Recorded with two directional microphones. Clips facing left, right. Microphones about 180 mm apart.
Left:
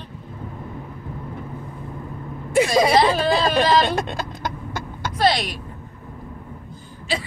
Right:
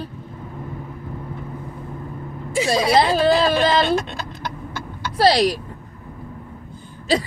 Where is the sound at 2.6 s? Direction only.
60° left (ahead or behind).